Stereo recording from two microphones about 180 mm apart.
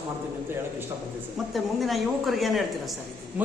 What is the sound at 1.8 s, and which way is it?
Speech, centre (ahead or behind).